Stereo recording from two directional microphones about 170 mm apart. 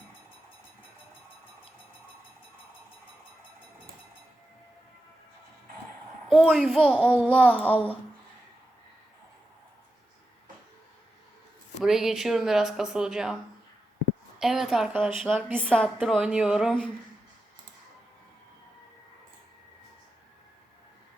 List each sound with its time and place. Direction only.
6.2 s speech: centre (ahead or behind)
7.7 s speech: 35° left (ahead or behind)
11.8 s speech: centre (ahead or behind)
14.3 s speech: centre (ahead or behind)